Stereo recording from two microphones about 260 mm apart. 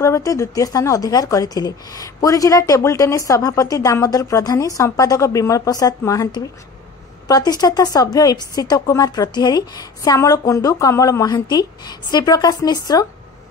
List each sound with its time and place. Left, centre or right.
0.0 s a woman's voice: centre